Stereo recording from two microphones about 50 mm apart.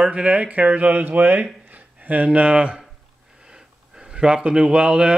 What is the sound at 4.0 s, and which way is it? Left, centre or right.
A man's voice, centre.